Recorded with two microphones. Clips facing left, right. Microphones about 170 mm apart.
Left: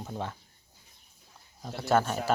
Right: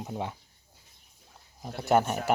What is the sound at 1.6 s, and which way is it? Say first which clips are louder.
Speech: right 2 dB; 15° right (ahead or behind).